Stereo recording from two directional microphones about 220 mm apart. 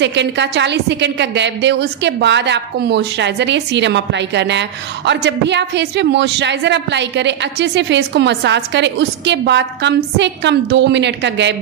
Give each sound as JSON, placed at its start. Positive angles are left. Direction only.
{"t": 0.0, "sound": "a woman's voice", "side_deg": -55}